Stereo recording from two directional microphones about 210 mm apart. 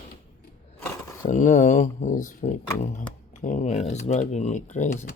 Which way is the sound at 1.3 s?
35° left (ahead or behind).